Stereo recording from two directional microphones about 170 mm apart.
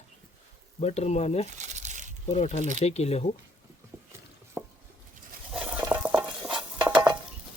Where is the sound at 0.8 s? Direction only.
40° left (ahead or behind).